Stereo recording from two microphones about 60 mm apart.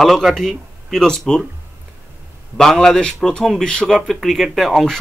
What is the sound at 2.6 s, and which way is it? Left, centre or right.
Speech, centre.